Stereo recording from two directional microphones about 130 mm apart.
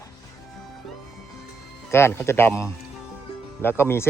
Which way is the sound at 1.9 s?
20° left (ahead or behind).